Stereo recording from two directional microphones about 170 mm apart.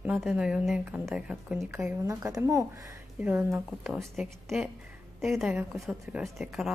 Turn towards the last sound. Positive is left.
turn(degrees=0)  # may be behind; listen again after turning